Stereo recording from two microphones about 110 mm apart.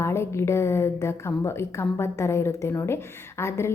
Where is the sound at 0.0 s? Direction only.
25° left (ahead or behind).